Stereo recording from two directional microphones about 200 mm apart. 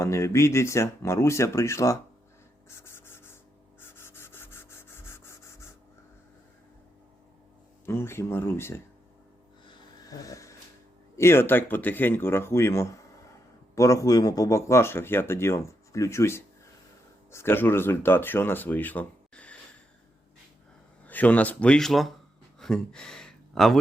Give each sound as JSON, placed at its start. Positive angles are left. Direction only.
{"t": 0.0, "sound": "speech", "side_deg": 15}
{"t": 2.6, "sound": "rub", "side_deg": 10}
{"t": 7.9, "sound": "speech", "side_deg": 10}
{"t": 9.6, "sound": "a sound", "side_deg": 20}
{"t": 11.2, "sound": "speech", "side_deg": 10}
{"t": 21.1, "sound": "speech", "side_deg": 10}